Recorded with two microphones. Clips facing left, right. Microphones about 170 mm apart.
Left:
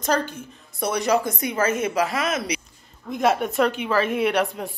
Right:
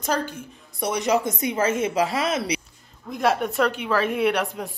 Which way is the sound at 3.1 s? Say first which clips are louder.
Left 1 dB; centre (ahead or behind).